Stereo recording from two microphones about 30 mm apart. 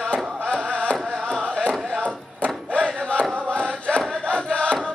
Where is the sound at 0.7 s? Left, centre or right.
Left.